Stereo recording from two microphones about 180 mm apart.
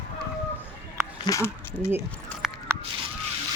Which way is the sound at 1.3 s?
15° left (ahead or behind).